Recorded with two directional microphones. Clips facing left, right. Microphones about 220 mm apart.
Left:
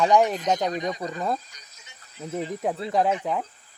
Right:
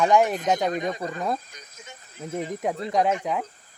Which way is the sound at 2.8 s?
Centre (ahead or behind).